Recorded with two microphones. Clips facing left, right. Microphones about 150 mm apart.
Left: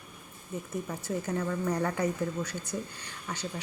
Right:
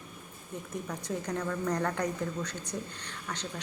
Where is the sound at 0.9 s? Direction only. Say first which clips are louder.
Left 1 dB; 5° left (ahead or behind).